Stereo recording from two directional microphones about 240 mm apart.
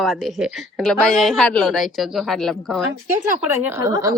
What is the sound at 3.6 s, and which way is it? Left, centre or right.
Speech, centre.